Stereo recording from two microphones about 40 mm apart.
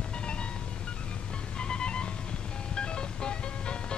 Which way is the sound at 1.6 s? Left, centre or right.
Left.